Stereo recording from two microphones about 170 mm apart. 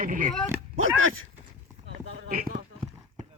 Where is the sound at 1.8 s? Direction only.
60° right (ahead or behind).